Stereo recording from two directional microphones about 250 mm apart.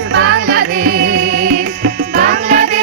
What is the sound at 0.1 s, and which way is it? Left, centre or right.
Music, right.